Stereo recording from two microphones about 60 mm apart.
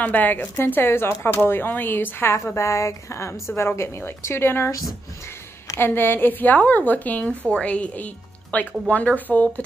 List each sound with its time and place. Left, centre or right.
0.0 s speech: left
2.3 s a woman's voice: left
5.8 s speech: left